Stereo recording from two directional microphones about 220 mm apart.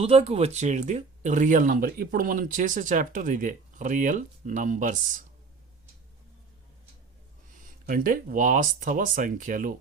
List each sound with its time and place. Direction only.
0.0 s speech: 30° right (ahead or behind)
7.5 s speech: 40° right (ahead or behind)